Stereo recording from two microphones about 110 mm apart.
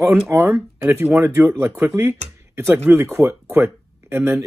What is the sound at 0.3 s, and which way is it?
Speech, 20° right (ahead or behind).